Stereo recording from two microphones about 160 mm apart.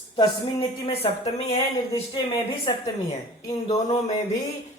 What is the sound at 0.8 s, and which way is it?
Speech, 35° left (ahead or behind).